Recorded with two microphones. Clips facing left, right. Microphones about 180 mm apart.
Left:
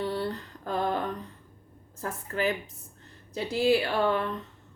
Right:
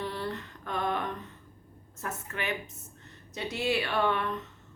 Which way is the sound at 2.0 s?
35° left (ahead or behind).